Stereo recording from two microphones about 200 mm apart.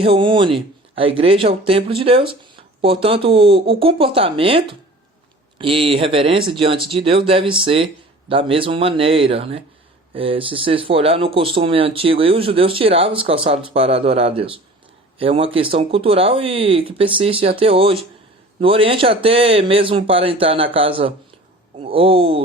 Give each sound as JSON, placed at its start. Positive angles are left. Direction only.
{"t": 0.0, "sound": "speech", "side_deg": -25}